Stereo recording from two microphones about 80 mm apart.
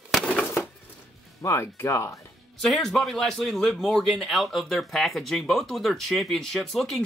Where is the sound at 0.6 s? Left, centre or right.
Left.